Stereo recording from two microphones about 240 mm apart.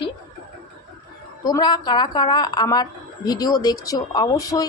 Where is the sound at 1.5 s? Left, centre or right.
Centre.